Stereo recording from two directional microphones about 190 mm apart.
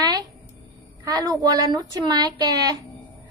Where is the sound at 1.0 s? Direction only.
20° right (ahead or behind).